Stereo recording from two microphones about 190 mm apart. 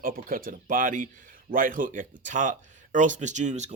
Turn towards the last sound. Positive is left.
turn(degrees=-40)  # may be behind; listen again after turning